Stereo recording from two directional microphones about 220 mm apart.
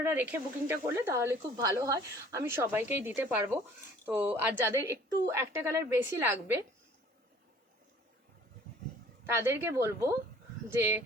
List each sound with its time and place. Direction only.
0.0 s speech: 10° right (ahead or behind)
8.7 s dog: 40° right (ahead or behind)
9.2 s speech: 10° right (ahead or behind)